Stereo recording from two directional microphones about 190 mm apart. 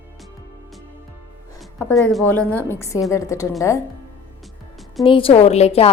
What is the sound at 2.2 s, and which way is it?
A woman's voice, 10° left (ahead or behind).